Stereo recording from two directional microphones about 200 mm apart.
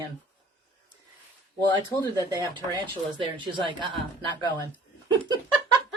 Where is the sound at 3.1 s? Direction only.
25° right (ahead or behind).